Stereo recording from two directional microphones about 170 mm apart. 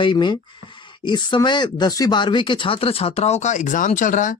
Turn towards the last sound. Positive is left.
turn(degrees=50)  # may be behind; listen again after turning